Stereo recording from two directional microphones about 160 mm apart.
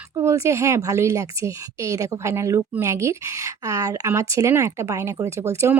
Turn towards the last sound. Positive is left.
turn(degrees=-15)  # may be behind; listen again after turning